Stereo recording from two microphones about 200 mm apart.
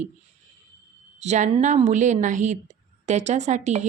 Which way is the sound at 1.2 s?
35° right (ahead or behind).